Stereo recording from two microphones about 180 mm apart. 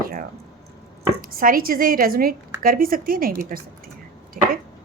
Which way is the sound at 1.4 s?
50° right (ahead or behind).